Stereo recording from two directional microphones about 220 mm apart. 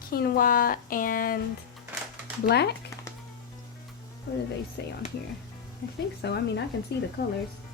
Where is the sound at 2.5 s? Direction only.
50° left (ahead or behind).